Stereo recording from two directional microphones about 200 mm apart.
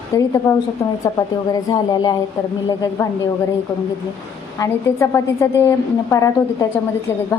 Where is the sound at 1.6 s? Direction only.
20° left (ahead or behind).